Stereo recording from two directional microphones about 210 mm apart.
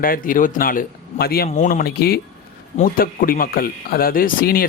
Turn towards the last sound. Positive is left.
turn(degrees=45)  # may be behind; listen again after turning